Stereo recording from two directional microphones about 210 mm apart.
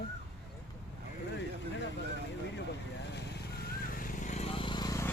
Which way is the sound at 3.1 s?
50° left (ahead or behind).